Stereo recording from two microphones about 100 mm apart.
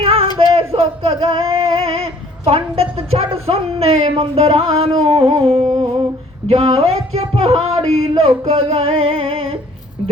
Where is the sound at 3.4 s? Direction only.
90° right.